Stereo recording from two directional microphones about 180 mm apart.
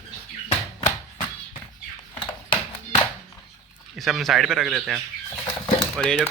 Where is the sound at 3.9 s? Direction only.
Centre (ahead or behind).